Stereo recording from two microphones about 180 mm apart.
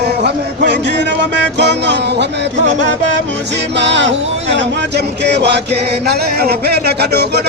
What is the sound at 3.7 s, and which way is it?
Music, 80° right.